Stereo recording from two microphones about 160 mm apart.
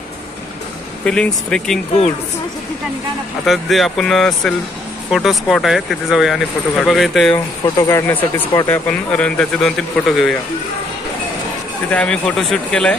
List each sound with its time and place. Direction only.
1.0 s speech: 5° left (ahead or behind)
3.4 s speech: centre (ahead or behind)
7.3 s speech: 25° left (ahead or behind)
8.1 s speech: 10° left (ahead or behind)
11.9 s speech: 5° left (ahead or behind)